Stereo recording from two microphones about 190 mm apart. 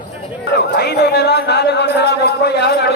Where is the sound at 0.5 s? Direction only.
60° left (ahead or behind).